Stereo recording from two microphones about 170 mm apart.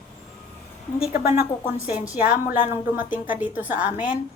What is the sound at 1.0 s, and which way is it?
A woman's voice, 10° right (ahead or behind).